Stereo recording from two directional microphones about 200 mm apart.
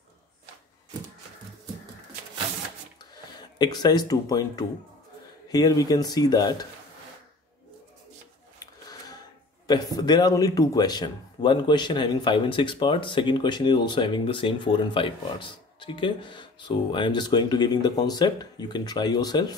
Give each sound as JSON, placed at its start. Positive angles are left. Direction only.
{"t": 3.3, "sound": "a man's voice", "side_deg": 20}
{"t": 9.7, "sound": "a man's voice", "side_deg": 20}